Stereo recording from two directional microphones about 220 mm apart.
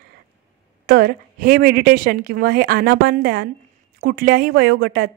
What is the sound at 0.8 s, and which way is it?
A woman's voice, 45° right (ahead or behind).